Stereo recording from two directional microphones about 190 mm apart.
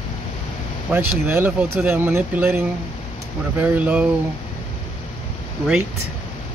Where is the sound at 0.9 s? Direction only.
10° right (ahead or behind).